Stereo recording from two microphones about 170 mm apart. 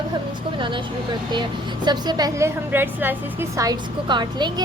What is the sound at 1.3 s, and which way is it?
A woman's voice, 25° right (ahead or behind).